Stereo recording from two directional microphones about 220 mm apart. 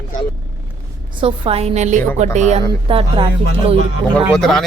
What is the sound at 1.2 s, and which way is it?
Speech, 25° right (ahead or behind).